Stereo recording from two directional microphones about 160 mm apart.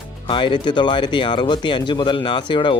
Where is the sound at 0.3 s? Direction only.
30° left (ahead or behind).